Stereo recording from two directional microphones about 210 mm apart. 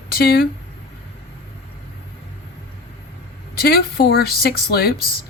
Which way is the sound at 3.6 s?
45° left (ahead or behind).